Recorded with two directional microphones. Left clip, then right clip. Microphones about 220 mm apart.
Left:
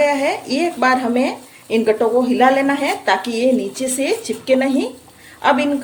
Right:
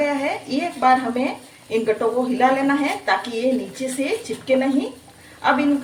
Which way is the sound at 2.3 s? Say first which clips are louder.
Left 2 dB; 40° left (ahead or behind).